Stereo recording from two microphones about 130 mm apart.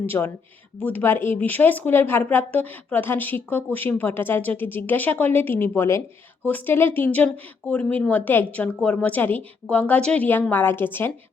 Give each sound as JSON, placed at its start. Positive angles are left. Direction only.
{"t": 0.0, "sound": "speech", "side_deg": 15}